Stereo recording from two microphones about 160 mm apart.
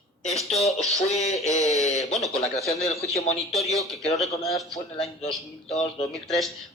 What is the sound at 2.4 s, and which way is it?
Speech, 40° left (ahead or behind).